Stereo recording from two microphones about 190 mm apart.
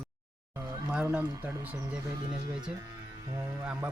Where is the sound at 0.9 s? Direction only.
5° right (ahead or behind).